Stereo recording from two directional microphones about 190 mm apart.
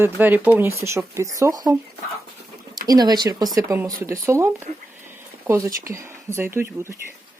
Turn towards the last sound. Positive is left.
turn(degrees=-15)  # may be behind; listen again after turning